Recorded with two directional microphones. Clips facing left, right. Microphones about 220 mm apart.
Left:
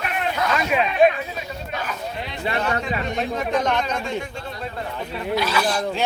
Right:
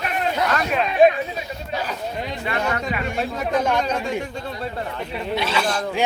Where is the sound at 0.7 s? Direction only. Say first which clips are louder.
Left 3 dB; 5° left (ahead or behind).